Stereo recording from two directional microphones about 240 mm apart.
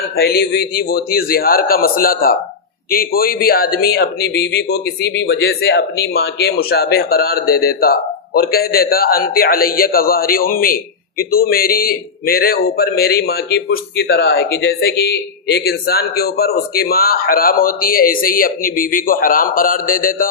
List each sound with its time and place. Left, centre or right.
0.2 s a man's voice: left